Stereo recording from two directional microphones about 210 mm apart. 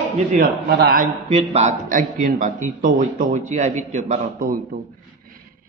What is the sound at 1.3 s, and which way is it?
A man's voice, 30° right (ahead or behind).